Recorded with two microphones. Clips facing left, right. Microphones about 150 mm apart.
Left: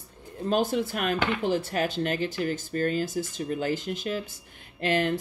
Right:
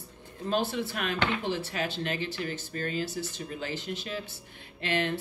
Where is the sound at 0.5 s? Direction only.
45° left (ahead or behind).